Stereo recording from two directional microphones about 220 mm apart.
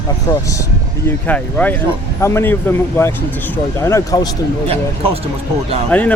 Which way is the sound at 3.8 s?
15° left (ahead or behind).